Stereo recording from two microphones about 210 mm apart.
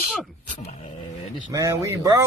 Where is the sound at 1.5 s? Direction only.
15° right (ahead or behind).